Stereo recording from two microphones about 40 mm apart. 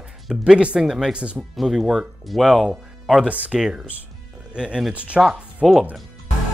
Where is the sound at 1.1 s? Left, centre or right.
Right.